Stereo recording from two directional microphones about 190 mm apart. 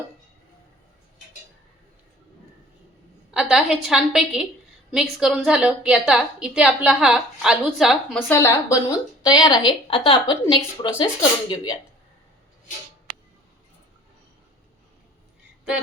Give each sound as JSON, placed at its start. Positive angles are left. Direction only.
{"t": 3.3, "sound": "a woman's voice", "side_deg": 0}
{"t": 8.3, "sound": "a woman's voice", "side_deg": 15}